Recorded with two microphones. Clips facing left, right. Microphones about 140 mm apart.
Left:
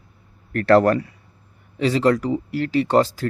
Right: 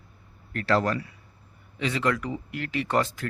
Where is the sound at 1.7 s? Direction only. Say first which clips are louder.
Left 8 dB; 35° left (ahead or behind).